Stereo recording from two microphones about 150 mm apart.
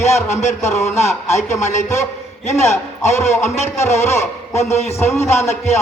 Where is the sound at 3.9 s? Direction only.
50° left (ahead or behind).